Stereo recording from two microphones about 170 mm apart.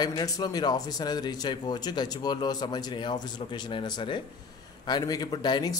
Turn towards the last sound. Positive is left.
turn(degrees=25)  # may be behind; listen again after turning